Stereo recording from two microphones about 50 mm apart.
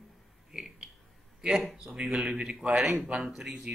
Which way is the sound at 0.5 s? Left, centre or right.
Centre.